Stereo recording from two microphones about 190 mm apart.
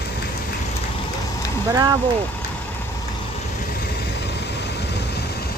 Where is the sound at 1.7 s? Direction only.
20° right (ahead or behind).